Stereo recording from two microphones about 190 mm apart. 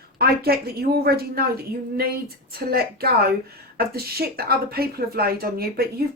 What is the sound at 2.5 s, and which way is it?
A woman's voice, 55° right (ahead or behind).